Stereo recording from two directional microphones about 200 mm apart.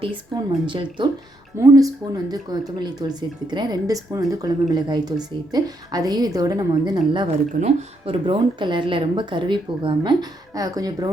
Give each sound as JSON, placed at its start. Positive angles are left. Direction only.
{"t": 0.0, "sound": "a woman's voice", "side_deg": -25}